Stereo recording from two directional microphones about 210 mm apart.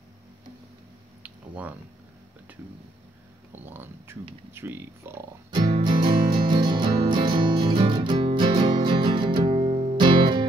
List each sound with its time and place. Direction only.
3.5 s a sound: 10° right (ahead or behind)
4.5 s speech: 10° right (ahead or behind)
5.5 s music: 25° right (ahead or behind)